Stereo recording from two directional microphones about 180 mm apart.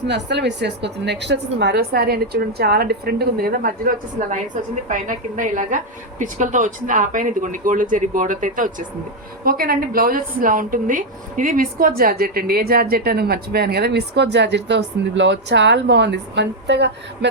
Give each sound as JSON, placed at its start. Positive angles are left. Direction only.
{"t": 0.1, "sound": "a woman's voice", "side_deg": -70}